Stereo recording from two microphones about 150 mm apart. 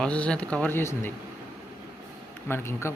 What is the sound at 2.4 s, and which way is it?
Speech, 15° left (ahead or behind).